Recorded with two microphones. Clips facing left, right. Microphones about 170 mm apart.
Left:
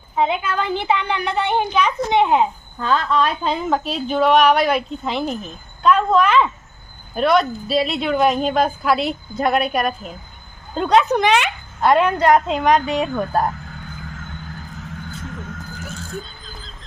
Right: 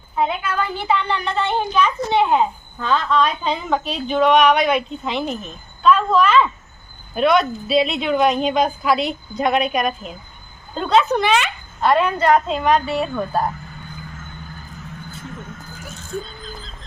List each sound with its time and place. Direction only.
0.3 s a woman's voice: 20° left (ahead or behind)
2.8 s a woman's voice: 5° left (ahead or behind)
5.8 s a woman's voice: 15° left (ahead or behind)
7.2 s a woman's voice: centre (ahead or behind)
10.8 s a woman's voice: 15° left (ahead or behind)
15.8 s a sound: centre (ahead or behind)